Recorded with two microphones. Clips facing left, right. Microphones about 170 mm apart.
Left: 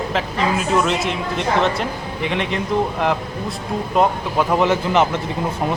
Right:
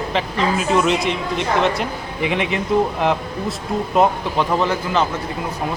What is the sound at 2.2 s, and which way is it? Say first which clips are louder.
Speech: right 1 dB; 5° right (ahead or behind).